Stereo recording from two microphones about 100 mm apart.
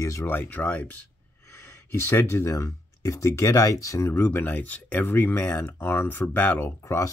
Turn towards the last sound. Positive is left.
turn(degrees=25)  # may be behind; listen again after turning